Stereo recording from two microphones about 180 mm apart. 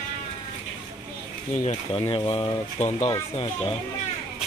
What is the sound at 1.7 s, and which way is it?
Speech, 30° left (ahead or behind).